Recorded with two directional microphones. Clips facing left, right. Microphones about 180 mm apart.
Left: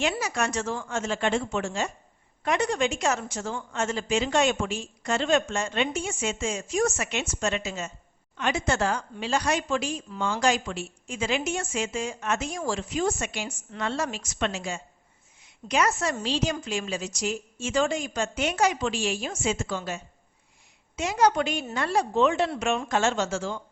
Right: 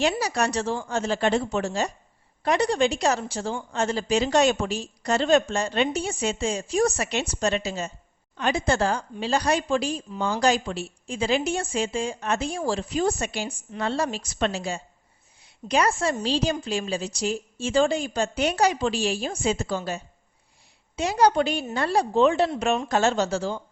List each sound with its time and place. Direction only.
0.0 s a woman's voice: 35° right (ahead or behind)